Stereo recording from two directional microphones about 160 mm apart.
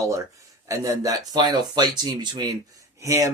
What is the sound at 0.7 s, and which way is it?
Speech, 20° right (ahead or behind).